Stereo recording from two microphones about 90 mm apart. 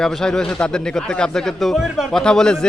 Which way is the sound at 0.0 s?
5° left (ahead or behind).